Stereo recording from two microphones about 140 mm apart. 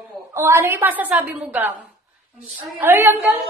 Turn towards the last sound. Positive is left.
turn(degrees=-15)  # may be behind; listen again after turning